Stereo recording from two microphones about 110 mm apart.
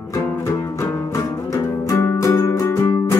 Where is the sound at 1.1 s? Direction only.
30° left (ahead or behind).